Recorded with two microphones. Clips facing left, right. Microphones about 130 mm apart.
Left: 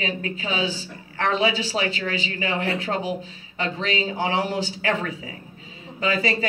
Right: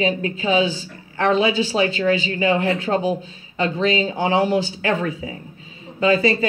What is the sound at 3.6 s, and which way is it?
Speech, 30° right (ahead or behind).